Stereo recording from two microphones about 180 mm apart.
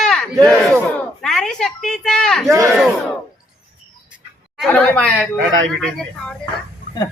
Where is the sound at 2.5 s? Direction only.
15° right (ahead or behind).